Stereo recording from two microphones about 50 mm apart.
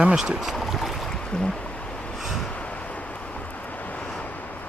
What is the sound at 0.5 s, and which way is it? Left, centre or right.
Boat, centre.